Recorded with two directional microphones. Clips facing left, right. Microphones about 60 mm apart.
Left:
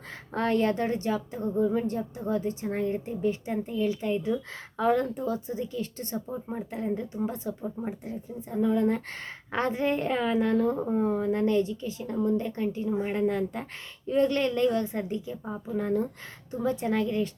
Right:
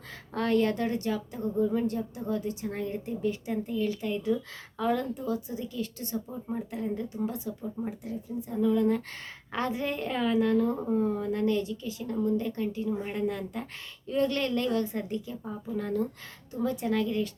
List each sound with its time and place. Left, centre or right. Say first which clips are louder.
0.3 s speech: left 1 dB; left